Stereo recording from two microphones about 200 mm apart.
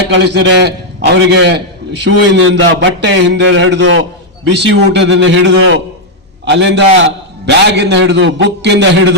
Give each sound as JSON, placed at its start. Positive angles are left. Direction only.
{"t": 0.1, "sound": "a man's voice", "side_deg": -60}